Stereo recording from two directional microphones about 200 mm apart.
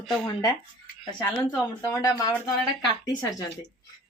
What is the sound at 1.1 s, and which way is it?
A woman's voice, 10° left (ahead or behind).